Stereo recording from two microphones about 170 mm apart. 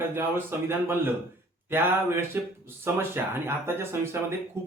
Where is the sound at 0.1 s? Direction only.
15° right (ahead or behind).